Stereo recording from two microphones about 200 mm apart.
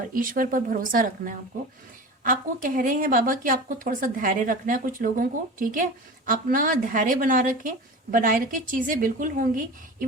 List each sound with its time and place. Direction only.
0.1 s speech: 45° right (ahead or behind)